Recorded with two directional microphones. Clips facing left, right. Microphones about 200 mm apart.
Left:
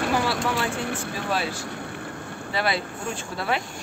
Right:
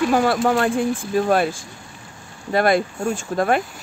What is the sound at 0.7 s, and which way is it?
Speech, 65° left (ahead or behind).